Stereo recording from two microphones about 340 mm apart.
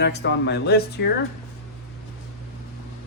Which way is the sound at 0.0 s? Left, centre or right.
Left.